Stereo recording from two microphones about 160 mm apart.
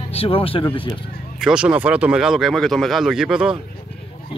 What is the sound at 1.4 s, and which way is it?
Speech, 5° right (ahead or behind).